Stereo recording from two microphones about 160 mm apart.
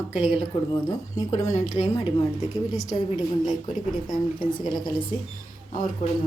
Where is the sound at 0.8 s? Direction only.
25° left (ahead or behind).